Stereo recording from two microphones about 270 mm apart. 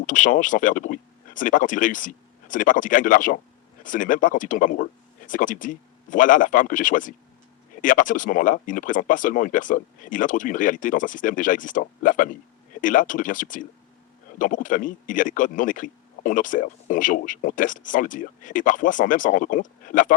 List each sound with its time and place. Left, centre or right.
0.0 s speech: left